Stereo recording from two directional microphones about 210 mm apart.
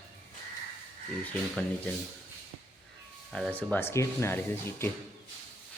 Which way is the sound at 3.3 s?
5° left (ahead or behind).